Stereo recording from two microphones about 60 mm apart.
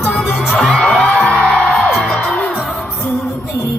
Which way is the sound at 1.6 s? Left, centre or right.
Centre.